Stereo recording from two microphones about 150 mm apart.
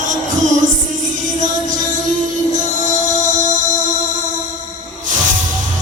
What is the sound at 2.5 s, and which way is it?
Music, 60° right (ahead or behind).